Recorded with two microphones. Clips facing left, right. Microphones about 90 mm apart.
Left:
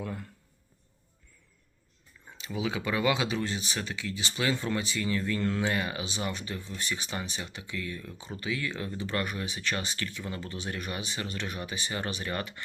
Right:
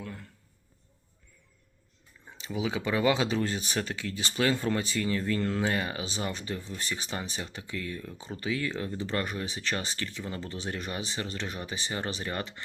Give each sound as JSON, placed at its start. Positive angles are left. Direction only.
{"t": 0.0, "sound": "speech", "side_deg": 10}
{"t": 2.4, "sound": "speech", "side_deg": -25}